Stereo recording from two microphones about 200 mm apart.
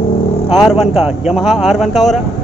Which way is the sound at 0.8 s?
Centre (ahead or behind).